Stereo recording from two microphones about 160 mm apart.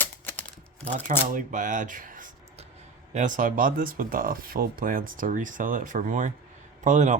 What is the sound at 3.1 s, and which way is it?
Speech, 55° right (ahead or behind).